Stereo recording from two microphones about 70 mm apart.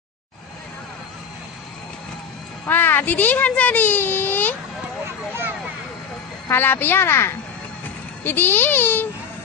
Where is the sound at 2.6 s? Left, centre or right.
Left.